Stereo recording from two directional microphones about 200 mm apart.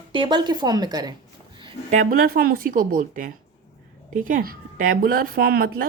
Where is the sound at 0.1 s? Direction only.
25° right (ahead or behind).